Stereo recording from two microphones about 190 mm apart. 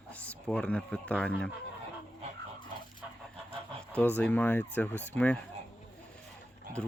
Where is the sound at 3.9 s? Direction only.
10° left (ahead or behind).